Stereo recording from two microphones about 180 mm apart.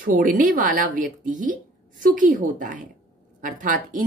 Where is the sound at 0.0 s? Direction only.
50° right (ahead or behind).